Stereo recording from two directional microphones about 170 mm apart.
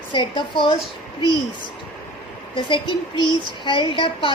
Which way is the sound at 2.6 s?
30° left (ahead or behind).